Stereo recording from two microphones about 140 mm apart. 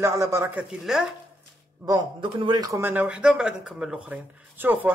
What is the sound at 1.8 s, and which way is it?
Speech, 30° right (ahead or behind).